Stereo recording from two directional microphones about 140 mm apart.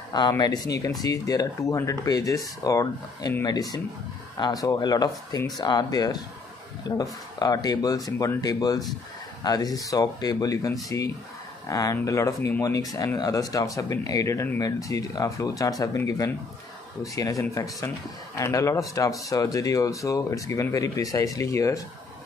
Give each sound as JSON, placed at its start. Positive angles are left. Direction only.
{"t": 0.3, "sound": "speech", "side_deg": 25}